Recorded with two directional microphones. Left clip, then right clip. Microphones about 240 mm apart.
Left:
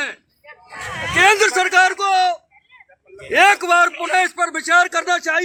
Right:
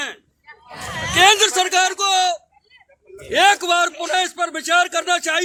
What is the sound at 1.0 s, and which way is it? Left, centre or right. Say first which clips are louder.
Speech: even; right.